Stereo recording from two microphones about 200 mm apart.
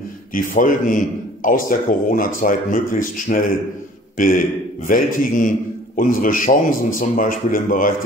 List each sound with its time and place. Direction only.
0.3 s a man's voice: 40° left (ahead or behind)